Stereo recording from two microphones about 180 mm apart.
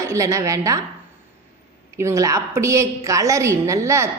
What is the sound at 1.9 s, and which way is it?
A woman's voice, 15° right (ahead or behind).